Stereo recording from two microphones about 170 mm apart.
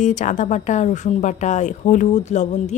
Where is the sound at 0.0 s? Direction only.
45° left (ahead or behind).